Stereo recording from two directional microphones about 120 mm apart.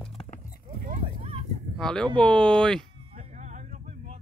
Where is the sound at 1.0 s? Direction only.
55° right (ahead or behind).